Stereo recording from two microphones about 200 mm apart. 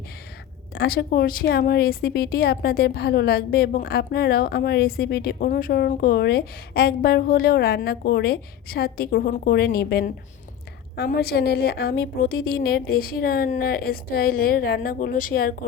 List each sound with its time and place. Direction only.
0.7 s a woman's voice: 55° left (ahead or behind)